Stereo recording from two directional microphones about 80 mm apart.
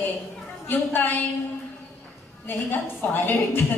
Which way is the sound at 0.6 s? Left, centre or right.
Left.